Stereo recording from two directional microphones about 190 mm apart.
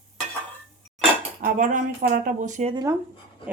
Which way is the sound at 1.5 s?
45° right (ahead or behind).